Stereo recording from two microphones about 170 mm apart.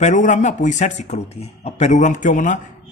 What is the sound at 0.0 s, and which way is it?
A man's voice, 45° left (ahead or behind).